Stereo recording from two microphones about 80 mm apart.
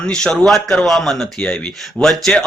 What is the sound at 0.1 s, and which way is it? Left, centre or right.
Speech, centre.